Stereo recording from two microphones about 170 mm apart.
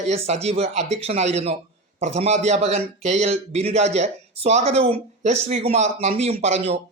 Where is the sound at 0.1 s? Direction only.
40° right (ahead or behind).